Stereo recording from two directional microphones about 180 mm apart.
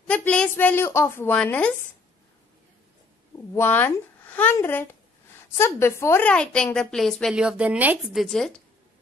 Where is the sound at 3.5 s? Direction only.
10° left (ahead or behind).